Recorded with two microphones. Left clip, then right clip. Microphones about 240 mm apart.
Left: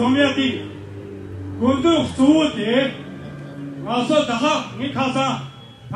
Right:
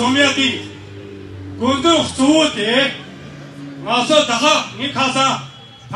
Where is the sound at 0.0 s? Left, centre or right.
Centre.